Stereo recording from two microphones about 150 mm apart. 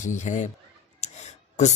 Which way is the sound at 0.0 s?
55° left (ahead or behind).